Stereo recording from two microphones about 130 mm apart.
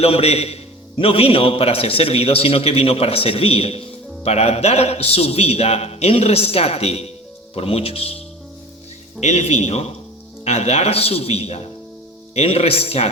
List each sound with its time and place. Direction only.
0.0 s a man's voice: 50° left (ahead or behind)
9.2 s a man's voice: 60° left (ahead or behind)